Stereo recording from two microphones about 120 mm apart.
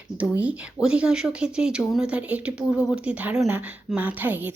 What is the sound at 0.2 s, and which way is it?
Speech, 10° right (ahead or behind).